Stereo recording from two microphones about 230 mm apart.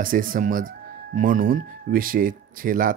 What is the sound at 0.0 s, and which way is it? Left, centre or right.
Speech, right.